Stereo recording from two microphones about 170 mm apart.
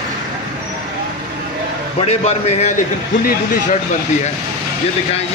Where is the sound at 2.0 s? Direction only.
40° left (ahead or behind).